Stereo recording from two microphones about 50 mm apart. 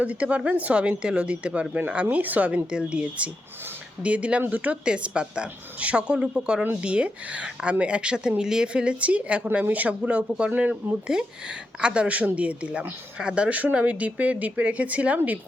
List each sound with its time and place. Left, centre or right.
0.0 s speech: right
2.6 s speech: centre
4.9 s speech: right